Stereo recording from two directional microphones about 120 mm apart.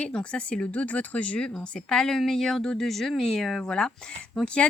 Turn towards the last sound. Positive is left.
turn(degrees=10)  # may be behind; listen again after turning